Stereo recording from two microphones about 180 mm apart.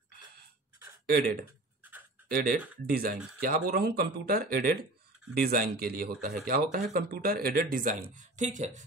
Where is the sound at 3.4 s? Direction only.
60° right (ahead or behind).